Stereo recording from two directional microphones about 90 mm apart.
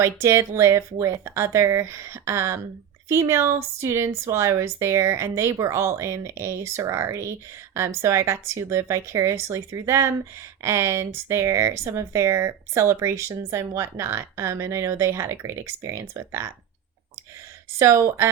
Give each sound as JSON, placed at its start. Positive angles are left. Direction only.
{"t": 0.0, "sound": "speech", "side_deg": -30}
{"t": 17.7, "sound": "speech", "side_deg": -35}